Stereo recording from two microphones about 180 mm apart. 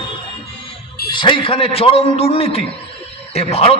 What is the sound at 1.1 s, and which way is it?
A man's voice, 25° left (ahead or behind).